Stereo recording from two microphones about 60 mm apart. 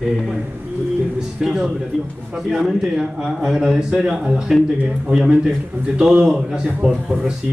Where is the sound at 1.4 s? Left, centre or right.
Centre.